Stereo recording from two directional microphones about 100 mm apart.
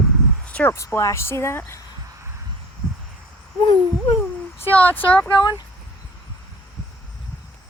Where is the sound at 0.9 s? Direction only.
25° left (ahead or behind).